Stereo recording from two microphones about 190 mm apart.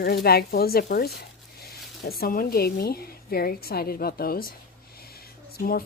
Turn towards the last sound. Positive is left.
turn(degrees=50)  # may be behind; listen again after turning